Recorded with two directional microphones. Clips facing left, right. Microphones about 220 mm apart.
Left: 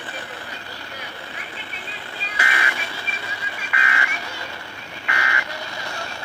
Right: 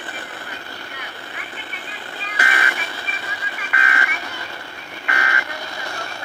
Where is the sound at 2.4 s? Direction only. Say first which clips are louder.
Right 2 dB; 45° right (ahead or behind).